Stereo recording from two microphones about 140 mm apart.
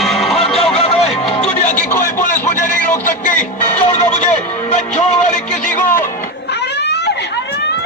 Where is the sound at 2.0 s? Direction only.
70° left (ahead or behind).